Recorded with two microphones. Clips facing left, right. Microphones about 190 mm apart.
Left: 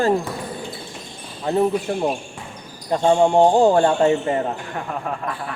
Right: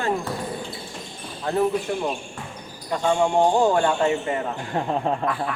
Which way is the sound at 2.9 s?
30° left (ahead or behind).